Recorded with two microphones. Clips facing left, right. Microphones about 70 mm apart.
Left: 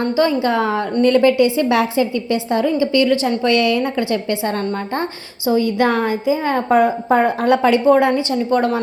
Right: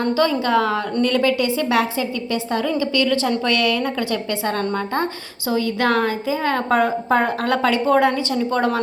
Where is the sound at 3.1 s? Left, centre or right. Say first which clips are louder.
Left 3 dB; centre.